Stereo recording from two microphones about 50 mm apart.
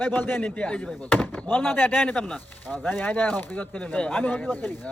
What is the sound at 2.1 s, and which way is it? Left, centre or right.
Speech, centre.